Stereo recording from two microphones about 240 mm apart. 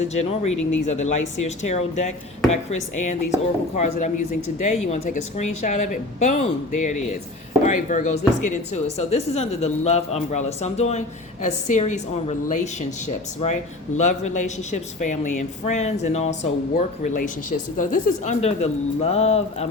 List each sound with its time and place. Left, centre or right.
0.1 s speech: left